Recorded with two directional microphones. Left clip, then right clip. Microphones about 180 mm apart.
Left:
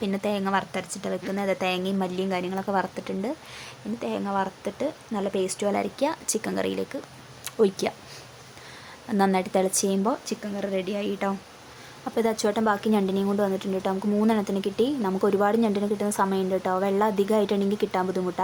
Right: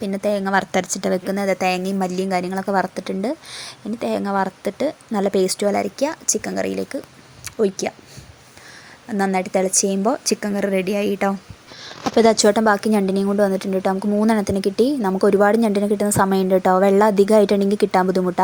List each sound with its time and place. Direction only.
0.0 s a woman's voice: 20° right (ahead or behind)
0.7 s a woman's voice: 40° right (ahead or behind); by 6.9 s 20° right (ahead or behind)
7.4 s speech: 10° right (ahead or behind)
9.0 s a woman's voice: 15° right (ahead or behind)
10.2 s speech: 45° right (ahead or behind)